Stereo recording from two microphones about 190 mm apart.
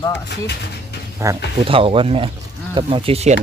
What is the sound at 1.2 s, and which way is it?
Speech, 15° right (ahead or behind).